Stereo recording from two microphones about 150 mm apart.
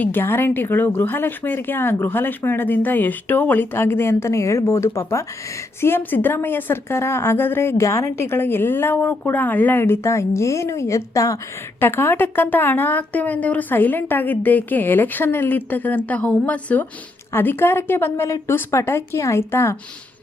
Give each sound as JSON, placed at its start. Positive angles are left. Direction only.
{"t": 0.0, "sound": "a woman's voice", "side_deg": 15}